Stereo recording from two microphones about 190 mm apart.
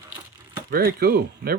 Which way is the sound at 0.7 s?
50° right (ahead or behind).